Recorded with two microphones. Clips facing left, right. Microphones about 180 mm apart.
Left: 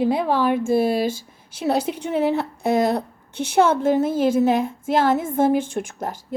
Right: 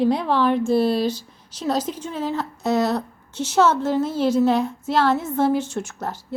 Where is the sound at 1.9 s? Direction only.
65° left (ahead or behind).